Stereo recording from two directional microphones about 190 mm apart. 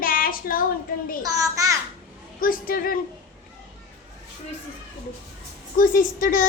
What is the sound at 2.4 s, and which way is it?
Speech, 50° left (ahead or behind).